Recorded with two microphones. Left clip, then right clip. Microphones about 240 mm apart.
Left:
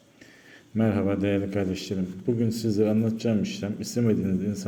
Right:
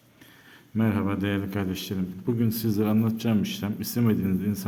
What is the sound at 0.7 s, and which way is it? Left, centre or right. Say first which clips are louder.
A man's voice: left 2 dB; centre.